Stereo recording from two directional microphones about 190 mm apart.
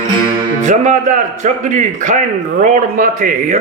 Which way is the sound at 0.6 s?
40° right (ahead or behind).